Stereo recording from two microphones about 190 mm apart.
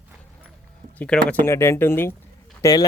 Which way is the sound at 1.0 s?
5° left (ahead or behind).